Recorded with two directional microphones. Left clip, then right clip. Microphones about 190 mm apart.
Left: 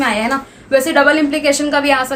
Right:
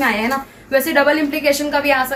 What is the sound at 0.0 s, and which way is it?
A woman's voice, 50° left (ahead or behind).